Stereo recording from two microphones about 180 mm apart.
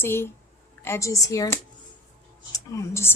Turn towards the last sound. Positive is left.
turn(degrees=15)  # may be behind; listen again after turning